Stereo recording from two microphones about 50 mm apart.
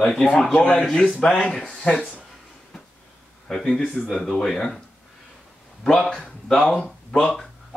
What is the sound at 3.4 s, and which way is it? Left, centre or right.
Speech, centre.